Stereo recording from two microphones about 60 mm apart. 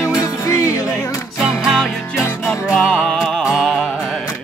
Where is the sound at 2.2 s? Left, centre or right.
Left.